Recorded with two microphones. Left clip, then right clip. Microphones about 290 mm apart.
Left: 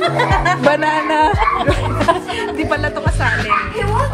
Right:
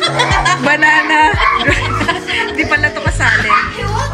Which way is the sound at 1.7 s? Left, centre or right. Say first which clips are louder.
Right 1 dB; centre.